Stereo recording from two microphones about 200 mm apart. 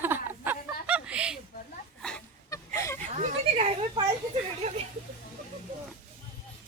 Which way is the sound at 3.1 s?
35° right (ahead or behind).